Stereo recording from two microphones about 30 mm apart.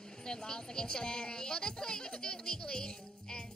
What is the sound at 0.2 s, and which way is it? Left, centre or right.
Speech, left.